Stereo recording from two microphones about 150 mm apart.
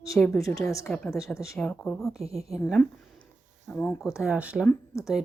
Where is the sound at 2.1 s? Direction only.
40° right (ahead or behind).